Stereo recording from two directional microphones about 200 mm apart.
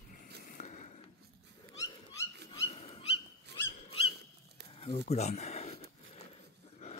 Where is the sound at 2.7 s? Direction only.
30° left (ahead or behind).